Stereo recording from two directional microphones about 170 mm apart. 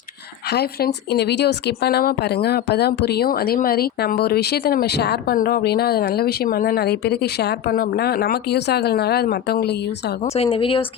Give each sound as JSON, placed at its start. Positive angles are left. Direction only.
{"t": 0.5, "sound": "speech", "side_deg": 70}
{"t": 10.2, "sound": "a woman's voice", "side_deg": 35}